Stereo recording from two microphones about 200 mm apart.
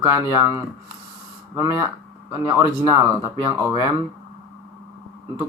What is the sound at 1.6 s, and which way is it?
Speech, 15° right (ahead or behind).